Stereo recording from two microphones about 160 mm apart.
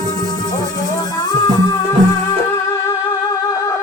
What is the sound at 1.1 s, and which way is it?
Music, 25° left (ahead or behind).